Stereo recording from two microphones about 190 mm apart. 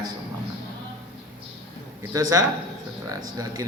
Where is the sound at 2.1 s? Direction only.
20° right (ahead or behind).